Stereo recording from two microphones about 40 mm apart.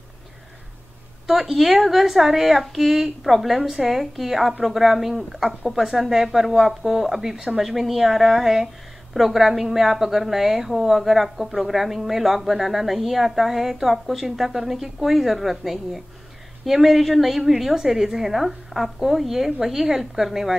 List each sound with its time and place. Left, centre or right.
1.2 s a woman's voice: centre